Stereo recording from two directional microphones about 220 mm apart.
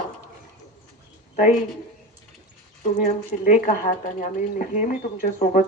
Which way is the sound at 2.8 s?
35° left (ahead or behind).